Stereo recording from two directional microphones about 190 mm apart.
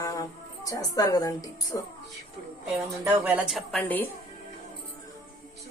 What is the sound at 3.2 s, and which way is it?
Speech, 5° right (ahead or behind).